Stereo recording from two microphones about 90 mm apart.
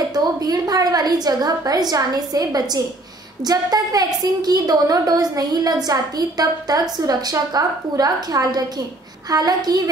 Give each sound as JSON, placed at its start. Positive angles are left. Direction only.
{"t": 0.1, "sound": "a woman's voice", "side_deg": -45}